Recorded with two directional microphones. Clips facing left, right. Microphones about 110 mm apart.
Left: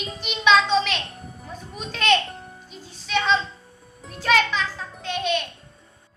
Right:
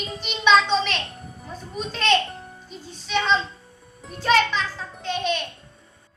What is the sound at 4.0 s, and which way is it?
A child's voice, centre (ahead or behind).